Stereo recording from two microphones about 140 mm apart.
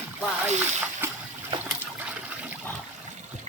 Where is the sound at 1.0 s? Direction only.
15° right (ahead or behind).